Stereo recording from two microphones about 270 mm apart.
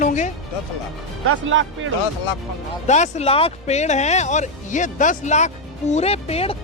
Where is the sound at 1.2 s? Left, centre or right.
Right.